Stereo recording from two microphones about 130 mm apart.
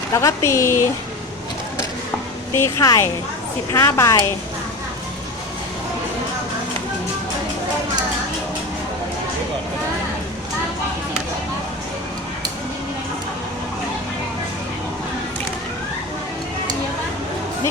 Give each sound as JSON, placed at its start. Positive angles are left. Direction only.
{"t": 0.1, "sound": "speech", "side_deg": 25}
{"t": 2.6, "sound": "speech", "side_deg": 25}